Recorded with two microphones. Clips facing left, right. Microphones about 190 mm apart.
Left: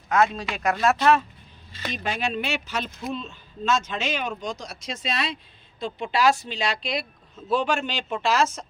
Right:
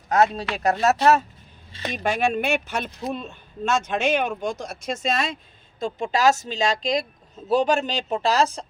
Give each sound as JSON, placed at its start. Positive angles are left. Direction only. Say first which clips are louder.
{"t": 0.1, "sound": "speech", "louder": "right 2 dB", "side_deg": -35}
{"t": 2.0, "sound": "speech", "louder": "right 6 dB", "side_deg": -45}